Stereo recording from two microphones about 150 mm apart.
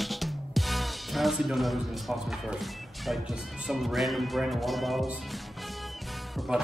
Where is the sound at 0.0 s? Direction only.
Centre (ahead or behind).